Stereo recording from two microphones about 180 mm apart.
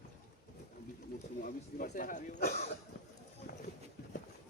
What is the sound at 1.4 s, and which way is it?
Speech, 50° left (ahead or behind).